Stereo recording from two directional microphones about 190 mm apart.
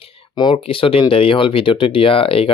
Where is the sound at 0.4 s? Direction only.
25° left (ahead or behind).